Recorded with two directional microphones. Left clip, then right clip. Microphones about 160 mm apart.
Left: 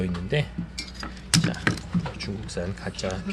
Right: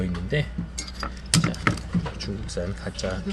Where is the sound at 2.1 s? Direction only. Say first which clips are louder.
Right 1 dB; 25° left (ahead or behind).